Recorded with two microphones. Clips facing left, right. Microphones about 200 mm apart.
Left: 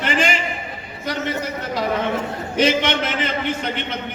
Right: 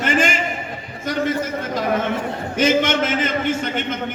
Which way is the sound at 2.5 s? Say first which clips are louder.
Right 1 dB; 45° right (ahead or behind).